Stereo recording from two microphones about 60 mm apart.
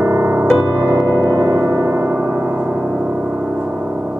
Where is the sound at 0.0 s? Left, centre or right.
Right.